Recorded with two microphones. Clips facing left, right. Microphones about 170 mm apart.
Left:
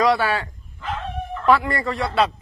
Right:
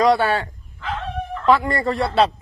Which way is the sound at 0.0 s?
25° right (ahead or behind).